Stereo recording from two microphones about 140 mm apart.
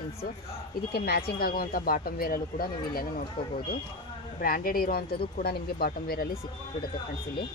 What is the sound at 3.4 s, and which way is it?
Speech, 35° left (ahead or behind).